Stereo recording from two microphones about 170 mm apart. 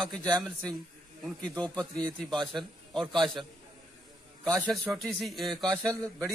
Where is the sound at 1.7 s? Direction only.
5° left (ahead or behind).